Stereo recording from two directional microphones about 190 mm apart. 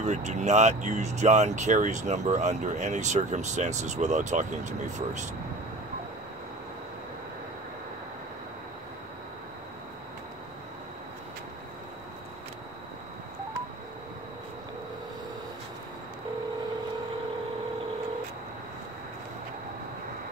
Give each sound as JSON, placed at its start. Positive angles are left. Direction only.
{"t": 0.0, "sound": "speech", "side_deg": -40}